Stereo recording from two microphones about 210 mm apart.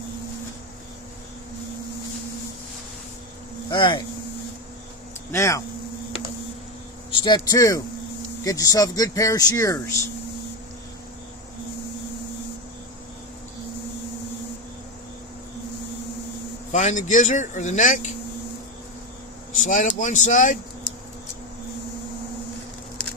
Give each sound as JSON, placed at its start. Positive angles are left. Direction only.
{"t": 3.7, "sound": "speech", "side_deg": 20}
{"t": 5.3, "sound": "speech", "side_deg": 15}
{"t": 7.1, "sound": "speech", "side_deg": 25}
{"t": 16.7, "sound": "speech", "side_deg": 35}
{"t": 19.5, "sound": "speech", "side_deg": 35}